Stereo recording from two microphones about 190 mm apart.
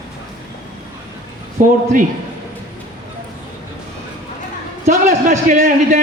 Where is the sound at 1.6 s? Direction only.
45° right (ahead or behind).